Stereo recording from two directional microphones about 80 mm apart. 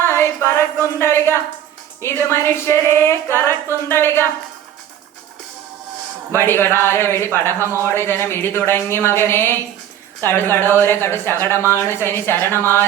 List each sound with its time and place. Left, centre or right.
0.0 s a woman's voice: left
6.3 s a woman's voice: left